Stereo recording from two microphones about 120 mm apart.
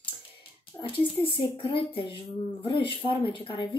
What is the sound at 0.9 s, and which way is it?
A woman's voice, 50° left (ahead or behind).